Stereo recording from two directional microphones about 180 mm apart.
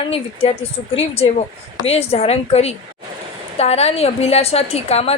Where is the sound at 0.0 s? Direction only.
30° left (ahead or behind).